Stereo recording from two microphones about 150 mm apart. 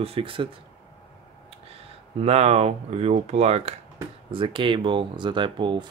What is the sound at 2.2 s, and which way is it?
Speech, 45° right (ahead or behind).